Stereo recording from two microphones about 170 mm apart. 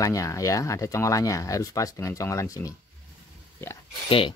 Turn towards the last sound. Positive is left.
turn(degrees=30)  # may be behind; listen again after turning